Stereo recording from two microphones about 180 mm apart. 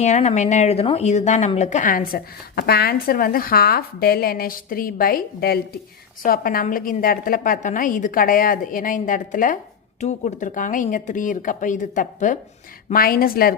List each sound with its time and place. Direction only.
0.0 s a woman's voice: 40° left (ahead or behind)